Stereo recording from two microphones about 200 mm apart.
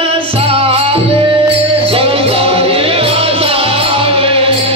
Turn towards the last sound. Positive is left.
turn(degrees=-30)  # may be behind; listen again after turning